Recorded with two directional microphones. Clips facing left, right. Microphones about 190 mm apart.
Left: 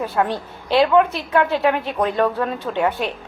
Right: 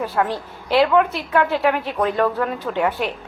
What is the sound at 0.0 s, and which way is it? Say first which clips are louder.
A woman's voice: left 1 dB; 25° left (ahead or behind).